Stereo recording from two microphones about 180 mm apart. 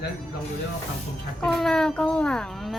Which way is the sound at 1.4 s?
Centre (ahead or behind).